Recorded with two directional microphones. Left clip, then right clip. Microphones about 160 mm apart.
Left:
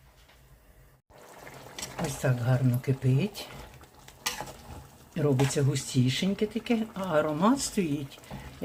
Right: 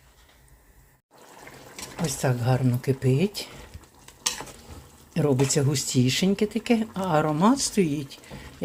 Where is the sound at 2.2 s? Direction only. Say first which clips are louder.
Right 5 dB; 45° right (ahead or behind).